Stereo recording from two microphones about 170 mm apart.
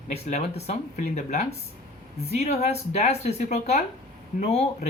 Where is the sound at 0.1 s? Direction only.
40° left (ahead or behind).